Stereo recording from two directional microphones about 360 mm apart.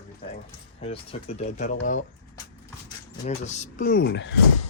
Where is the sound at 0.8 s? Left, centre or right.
Centre.